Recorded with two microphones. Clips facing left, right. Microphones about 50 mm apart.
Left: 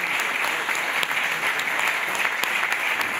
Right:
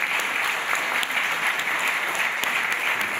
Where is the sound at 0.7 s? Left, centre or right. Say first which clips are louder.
Right 1 dB; right.